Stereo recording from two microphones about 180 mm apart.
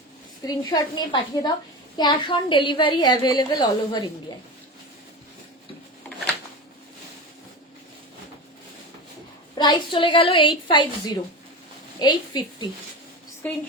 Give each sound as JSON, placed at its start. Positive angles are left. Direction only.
{"t": 0.4, "sound": "a woman's voice", "side_deg": 20}
{"t": 6.1, "sound": "a sound", "side_deg": 0}
{"t": 9.6, "sound": "a woman's voice", "side_deg": 25}